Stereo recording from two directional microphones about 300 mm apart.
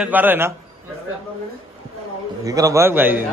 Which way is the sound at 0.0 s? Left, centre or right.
Centre.